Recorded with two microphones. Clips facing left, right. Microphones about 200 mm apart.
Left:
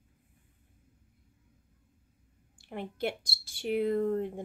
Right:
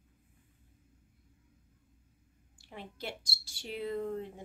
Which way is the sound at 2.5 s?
55° left (ahead or behind).